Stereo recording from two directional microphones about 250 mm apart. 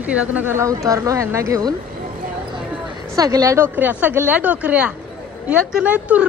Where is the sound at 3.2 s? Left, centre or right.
Centre.